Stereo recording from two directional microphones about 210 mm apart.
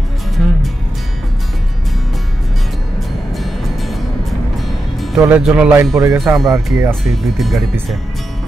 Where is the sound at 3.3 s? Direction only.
Centre (ahead or behind).